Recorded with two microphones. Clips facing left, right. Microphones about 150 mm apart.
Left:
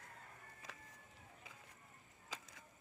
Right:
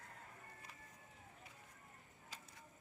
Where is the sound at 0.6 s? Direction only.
90° left.